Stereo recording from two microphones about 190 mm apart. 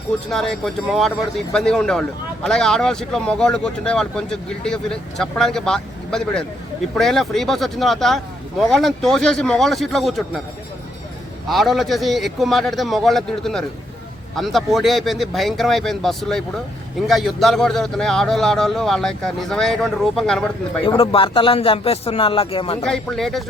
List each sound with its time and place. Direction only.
0.3 s speech: centre (ahead or behind)
11.4 s speech: centre (ahead or behind)
20.8 s speech: 30° left (ahead or behind)
22.9 s speech: 5° left (ahead or behind)